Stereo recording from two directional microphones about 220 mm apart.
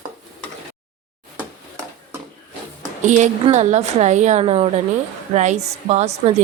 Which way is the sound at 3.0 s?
35° right (ahead or behind).